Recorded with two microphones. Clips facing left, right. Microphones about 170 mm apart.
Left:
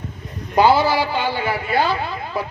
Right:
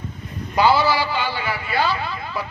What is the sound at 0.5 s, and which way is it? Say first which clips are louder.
A man's voice: left 2 dB; 50° left (ahead or behind).